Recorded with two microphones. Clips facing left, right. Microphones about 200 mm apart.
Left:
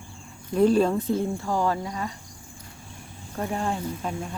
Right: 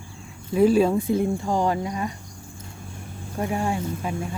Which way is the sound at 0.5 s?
10° right (ahead or behind).